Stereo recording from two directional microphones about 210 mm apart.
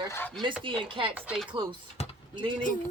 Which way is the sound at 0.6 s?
25° right (ahead or behind).